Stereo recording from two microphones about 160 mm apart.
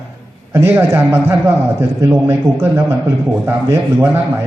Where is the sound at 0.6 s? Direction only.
15° right (ahead or behind).